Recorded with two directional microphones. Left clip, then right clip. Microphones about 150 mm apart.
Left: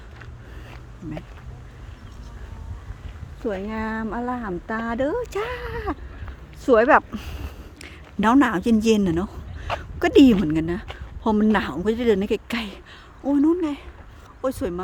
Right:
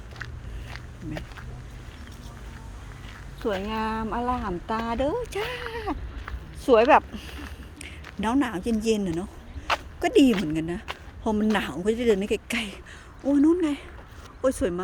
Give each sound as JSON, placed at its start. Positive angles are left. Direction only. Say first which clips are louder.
{"t": 3.4, "sound": "a woman's voice", "louder": "even", "side_deg": 45}
{"t": 10.0, "sound": "a woman's voice", "louder": "left 6 dB", "side_deg": 55}
{"t": 13.2, "sound": "speech", "louder": "left 1 dB", "side_deg": 20}